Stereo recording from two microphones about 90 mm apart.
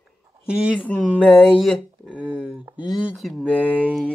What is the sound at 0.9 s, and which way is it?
Speech, 20° left (ahead or behind).